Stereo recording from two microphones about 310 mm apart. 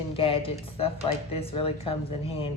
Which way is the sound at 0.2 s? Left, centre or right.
Centre.